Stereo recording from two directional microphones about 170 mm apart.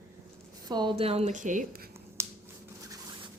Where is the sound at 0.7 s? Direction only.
25° right (ahead or behind); by 1.6 s 50° right (ahead or behind).